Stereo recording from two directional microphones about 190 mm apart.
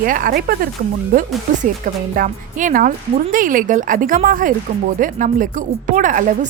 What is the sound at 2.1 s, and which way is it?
Speech, 45° right (ahead or behind).